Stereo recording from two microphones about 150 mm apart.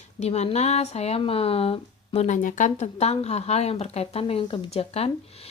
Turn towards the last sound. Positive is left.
turn(degrees=40)  # may be behind; listen again after turning